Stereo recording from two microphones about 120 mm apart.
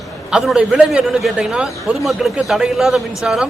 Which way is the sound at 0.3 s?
5° right (ahead or behind).